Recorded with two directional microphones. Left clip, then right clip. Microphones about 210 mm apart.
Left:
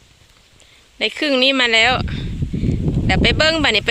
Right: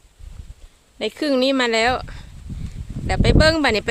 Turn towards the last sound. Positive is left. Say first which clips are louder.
# left 1 dB
turn(degrees=-5)  # may be behind; listen again after turning